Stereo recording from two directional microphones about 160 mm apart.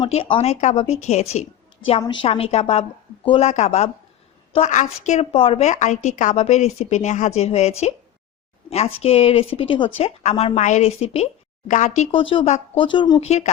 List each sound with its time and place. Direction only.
0.1 s speech: 35° left (ahead or behind)
2.0 s a woman's voice: 30° left (ahead or behind)
10.2 s speech: 40° left (ahead or behind)
11.7 s a woman's voice: 50° left (ahead or behind)
12.1 s speech: 35° left (ahead or behind)